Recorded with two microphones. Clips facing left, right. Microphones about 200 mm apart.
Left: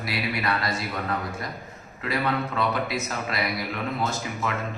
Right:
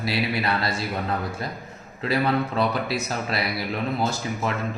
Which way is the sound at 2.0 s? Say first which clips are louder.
Right 4 dB; 35° right (ahead or behind).